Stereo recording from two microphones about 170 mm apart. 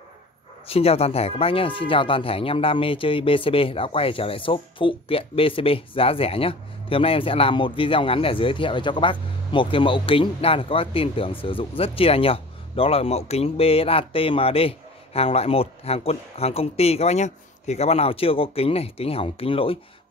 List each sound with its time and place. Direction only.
0.7 s speech: 35° left (ahead or behind)